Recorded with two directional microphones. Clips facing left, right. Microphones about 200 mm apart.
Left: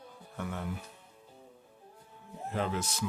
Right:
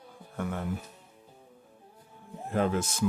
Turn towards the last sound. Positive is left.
turn(degrees=-50)  # may be behind; listen again after turning